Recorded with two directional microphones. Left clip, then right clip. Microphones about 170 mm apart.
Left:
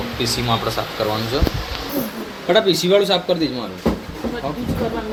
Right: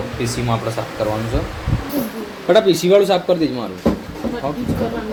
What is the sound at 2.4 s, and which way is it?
Speech, 30° right (ahead or behind).